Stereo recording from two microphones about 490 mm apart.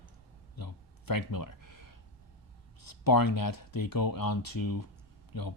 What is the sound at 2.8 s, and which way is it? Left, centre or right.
Speech, left.